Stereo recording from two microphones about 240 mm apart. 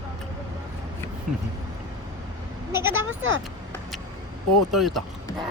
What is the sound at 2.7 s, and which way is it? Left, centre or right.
Speech, centre.